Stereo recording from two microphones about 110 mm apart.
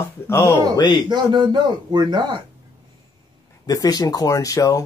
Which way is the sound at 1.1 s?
45° right (ahead or behind).